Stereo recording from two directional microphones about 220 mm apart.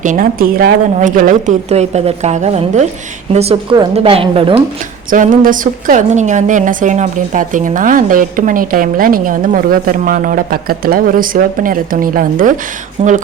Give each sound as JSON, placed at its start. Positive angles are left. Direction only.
{"t": 0.0, "sound": "a woman's voice", "side_deg": -35}
{"t": 5.1, "sound": "a woman's voice", "side_deg": -35}